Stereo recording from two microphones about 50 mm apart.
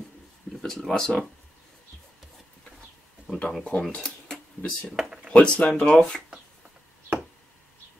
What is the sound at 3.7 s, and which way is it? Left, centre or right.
Speech, left.